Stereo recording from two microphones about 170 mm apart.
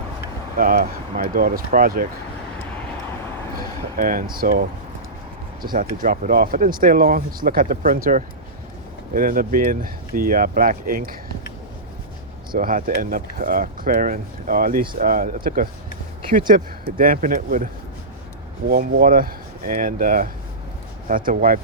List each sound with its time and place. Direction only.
0.5 s speech: 55° right (ahead or behind)
3.6 s a sound: 55° right (ahead or behind)
4.4 s speech: 60° right (ahead or behind)
5.7 s speech: 55° right (ahead or behind)
12.5 s speech: 55° right (ahead or behind)
16.5 s speech: 55° right (ahead or behind)
18.7 s speech: 55° right (ahead or behind)